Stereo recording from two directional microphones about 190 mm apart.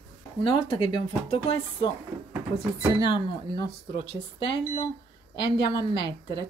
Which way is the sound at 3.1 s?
25° left (ahead or behind).